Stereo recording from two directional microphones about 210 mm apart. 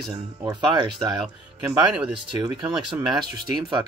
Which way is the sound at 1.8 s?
5° right (ahead or behind).